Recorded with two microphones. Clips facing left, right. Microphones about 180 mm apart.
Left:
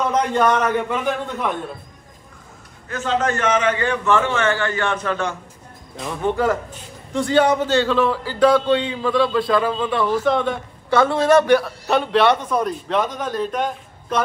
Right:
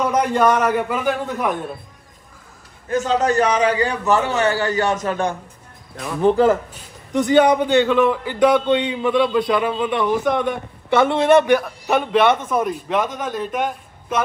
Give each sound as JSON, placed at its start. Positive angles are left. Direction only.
{"t": 0.0, "sound": "a man's voice", "side_deg": -10}
{"t": 3.0, "sound": "a man's voice", "side_deg": -40}
{"t": 6.2, "sound": "a man's voice", "side_deg": -30}
{"t": 7.1, "sound": "a man's voice", "side_deg": -15}
{"t": 12.5, "sound": "a man's voice", "side_deg": -5}